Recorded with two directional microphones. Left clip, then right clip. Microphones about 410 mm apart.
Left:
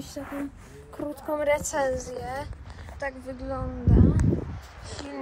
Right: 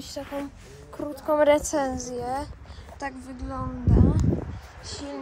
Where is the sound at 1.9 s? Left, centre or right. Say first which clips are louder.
Right 2 dB; centre.